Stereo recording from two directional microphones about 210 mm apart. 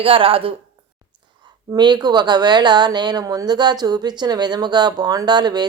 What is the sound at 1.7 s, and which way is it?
Speech, 20° right (ahead or behind).